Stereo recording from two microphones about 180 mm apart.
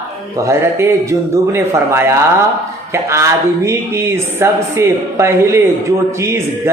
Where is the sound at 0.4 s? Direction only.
15° right (ahead or behind).